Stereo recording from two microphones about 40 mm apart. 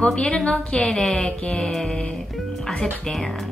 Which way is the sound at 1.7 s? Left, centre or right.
Centre.